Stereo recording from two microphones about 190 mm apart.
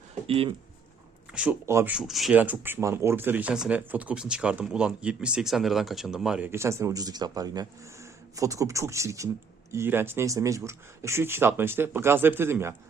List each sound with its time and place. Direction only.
0.3 s speech: 30° right (ahead or behind)
1.3 s speech: 5° right (ahead or behind)